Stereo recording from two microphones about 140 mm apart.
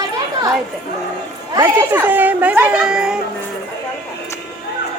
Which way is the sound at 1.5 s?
25° right (ahead or behind).